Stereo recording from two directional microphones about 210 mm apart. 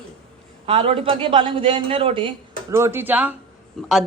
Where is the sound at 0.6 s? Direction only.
25° right (ahead or behind).